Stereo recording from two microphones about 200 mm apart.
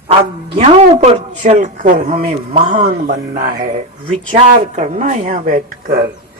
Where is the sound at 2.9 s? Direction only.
45° right (ahead or behind).